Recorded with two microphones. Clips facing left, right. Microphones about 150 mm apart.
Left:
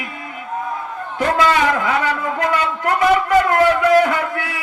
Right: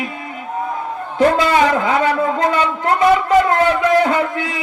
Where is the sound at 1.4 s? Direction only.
25° right (ahead or behind).